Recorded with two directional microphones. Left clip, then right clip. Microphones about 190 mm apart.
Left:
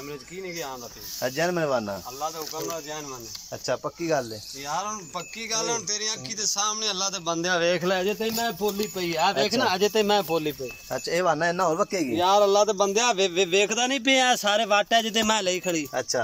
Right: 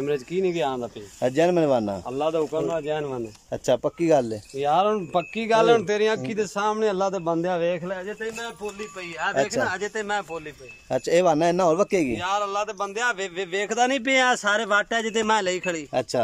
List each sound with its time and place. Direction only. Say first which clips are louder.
0.0 s speech: right 12 dB; 55° right (ahead or behind)
1.2 s speech: right 5 dB; 20° right (ahead or behind)
2.1 s speech: right 11 dB; 55° right (ahead or behind)
3.6 s speech: right 6 dB; 20° right (ahead or behind)
4.6 s speech: right 10 dB; 65° right (ahead or behind); by 7.0 s 50° right (ahead or behind)
7.1 s speech: right 2 dB; 30° right (ahead or behind)
8.0 s speech: left 5 dB; 15° left (ahead or behind)
10.9 s speech: right 5 dB; 15° right (ahead or behind)
12.2 s a man's voice: left 6 dB; 25° left (ahead or behind); by 15.8 s centre (ahead or behind)
15.9 s speech: right 3 dB; 15° right (ahead or behind)